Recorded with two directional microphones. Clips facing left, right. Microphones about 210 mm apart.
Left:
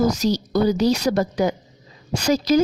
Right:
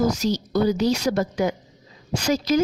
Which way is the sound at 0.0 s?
40° left (ahead or behind).